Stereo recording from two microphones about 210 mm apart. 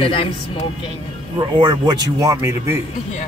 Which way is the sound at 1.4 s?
20° right (ahead or behind).